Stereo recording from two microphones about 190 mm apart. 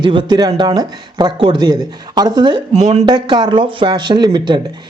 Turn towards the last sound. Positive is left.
turn(degrees=-25)  # may be behind; listen again after turning